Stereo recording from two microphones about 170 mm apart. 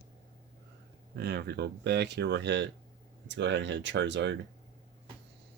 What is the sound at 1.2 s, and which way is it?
Speech, 75° right (ahead or behind).